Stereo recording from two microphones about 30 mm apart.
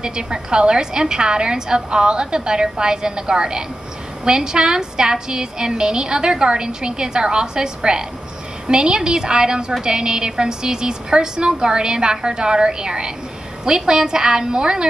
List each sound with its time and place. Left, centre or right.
0.0 s a woman's voice: right